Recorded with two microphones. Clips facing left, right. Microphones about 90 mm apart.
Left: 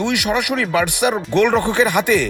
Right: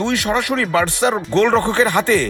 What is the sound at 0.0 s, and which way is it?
Speech, 15° left (ahead or behind).